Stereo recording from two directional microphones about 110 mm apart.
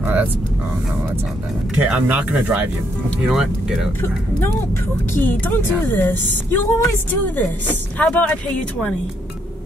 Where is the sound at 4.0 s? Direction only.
20° left (ahead or behind).